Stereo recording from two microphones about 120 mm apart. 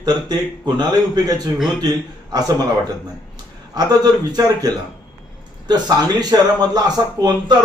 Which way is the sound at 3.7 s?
35° right (ahead or behind).